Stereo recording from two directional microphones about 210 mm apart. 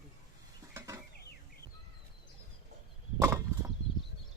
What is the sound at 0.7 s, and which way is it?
Mechanisms, 15° right (ahead or behind).